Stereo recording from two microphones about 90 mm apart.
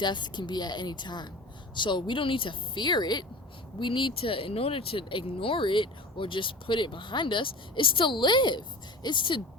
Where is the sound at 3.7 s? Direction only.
65° left (ahead or behind).